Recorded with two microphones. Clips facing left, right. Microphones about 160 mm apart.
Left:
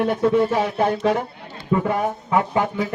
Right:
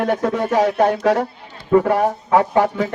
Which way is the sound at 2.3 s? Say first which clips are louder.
Right 5 dB; 75° right (ahead or behind).